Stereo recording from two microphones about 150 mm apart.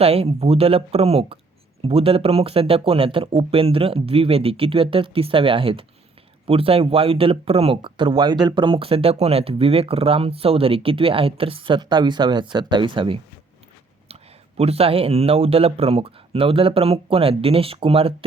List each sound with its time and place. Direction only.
0.0 s speech: 40° right (ahead or behind)
14.6 s speech: 40° right (ahead or behind)